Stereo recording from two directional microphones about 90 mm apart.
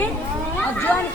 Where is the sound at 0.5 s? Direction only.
15° left (ahead or behind).